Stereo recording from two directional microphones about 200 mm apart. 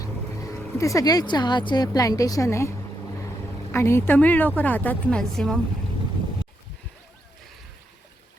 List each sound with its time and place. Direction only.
0.0 s a woman's voice: 15° left (ahead or behind)